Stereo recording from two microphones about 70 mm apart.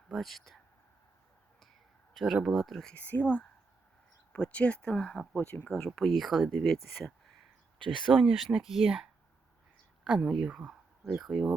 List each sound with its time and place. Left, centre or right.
0.1 s speech: centre
2.1 s speech: centre
3.0 s speech: left
6.0 s speech: centre
8.1 s speech: centre